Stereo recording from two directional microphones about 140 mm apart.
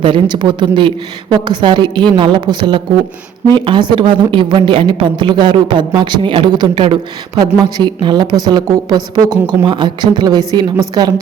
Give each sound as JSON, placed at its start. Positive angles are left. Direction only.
{"t": 0.0, "sound": "a woman's voice", "side_deg": -35}